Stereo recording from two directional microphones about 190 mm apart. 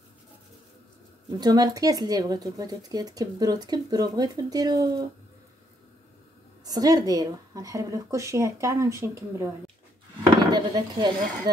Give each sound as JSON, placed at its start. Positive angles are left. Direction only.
{"t": 1.4, "sound": "speech", "side_deg": -20}
{"t": 6.6, "sound": "speech", "side_deg": -20}
{"t": 10.5, "sound": "speech", "side_deg": -20}